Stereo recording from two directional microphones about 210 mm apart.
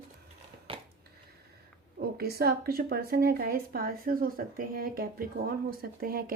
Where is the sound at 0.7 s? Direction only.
25° right (ahead or behind).